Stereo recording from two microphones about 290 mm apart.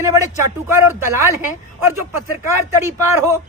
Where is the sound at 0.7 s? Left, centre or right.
Centre.